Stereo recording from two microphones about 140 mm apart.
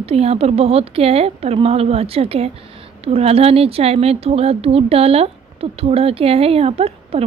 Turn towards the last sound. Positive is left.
turn(degrees=-45)  # may be behind; listen again after turning